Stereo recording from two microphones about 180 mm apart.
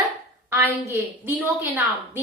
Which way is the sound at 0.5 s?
15° right (ahead or behind).